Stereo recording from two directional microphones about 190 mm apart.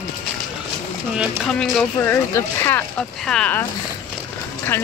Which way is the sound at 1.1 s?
Centre (ahead or behind).